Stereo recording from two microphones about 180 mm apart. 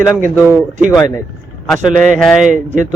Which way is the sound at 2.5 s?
45° right (ahead or behind).